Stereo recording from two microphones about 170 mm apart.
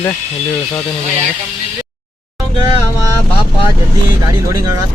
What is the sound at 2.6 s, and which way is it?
Speech, 25° right (ahead or behind).